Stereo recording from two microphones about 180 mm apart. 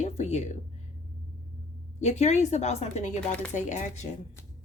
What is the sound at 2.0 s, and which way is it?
A woman's voice, 40° left (ahead or behind).